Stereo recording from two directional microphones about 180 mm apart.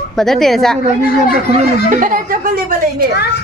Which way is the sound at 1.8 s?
45° right (ahead or behind).